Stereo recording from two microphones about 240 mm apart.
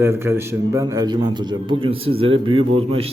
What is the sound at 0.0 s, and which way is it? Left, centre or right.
A man's voice, centre.